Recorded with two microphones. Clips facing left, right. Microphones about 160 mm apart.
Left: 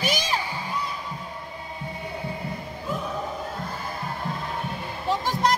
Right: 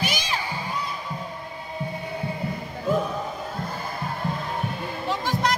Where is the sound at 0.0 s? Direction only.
40° left (ahead or behind).